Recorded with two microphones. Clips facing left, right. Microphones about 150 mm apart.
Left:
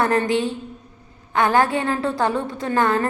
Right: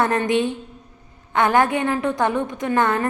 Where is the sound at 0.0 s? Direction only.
20° right (ahead or behind).